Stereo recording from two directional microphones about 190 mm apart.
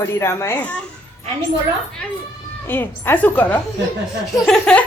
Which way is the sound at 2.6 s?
10° left (ahead or behind).